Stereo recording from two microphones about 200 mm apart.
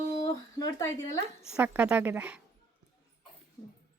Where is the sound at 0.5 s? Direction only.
15° left (ahead or behind).